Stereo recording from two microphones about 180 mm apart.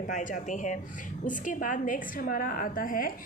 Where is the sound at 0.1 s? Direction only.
45° left (ahead or behind).